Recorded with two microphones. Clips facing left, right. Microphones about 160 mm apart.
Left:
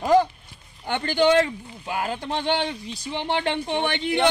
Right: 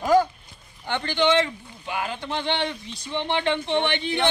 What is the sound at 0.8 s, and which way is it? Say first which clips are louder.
Speech: left 2 dB; 45° left (ahead or behind).